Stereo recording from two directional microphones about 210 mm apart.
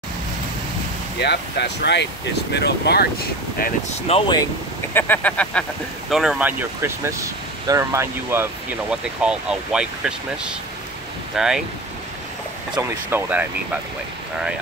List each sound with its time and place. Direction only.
1.2 s speech: 50° left (ahead or behind)
4.1 s speech: 20° left (ahead or behind)
4.9 s speech: 10° left (ahead or behind)
12.7 s speech: 10° right (ahead or behind)